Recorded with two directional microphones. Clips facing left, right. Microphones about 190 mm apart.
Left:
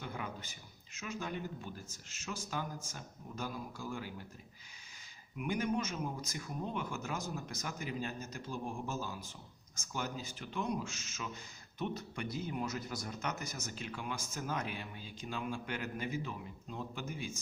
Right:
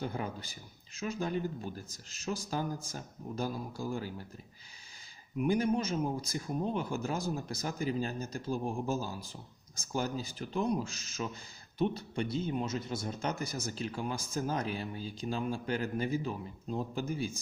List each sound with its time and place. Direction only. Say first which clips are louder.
0.0 s speech: right 6 dB; 35° right (ahead or behind)
5.4 s speech: right 6 dB; 35° right (ahead or behind)